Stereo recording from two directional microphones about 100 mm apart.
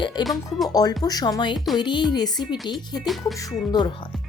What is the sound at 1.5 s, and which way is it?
Speech, centre (ahead or behind).